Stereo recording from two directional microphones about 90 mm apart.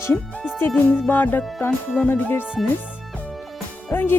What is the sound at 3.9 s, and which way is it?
Speech, 20° left (ahead or behind).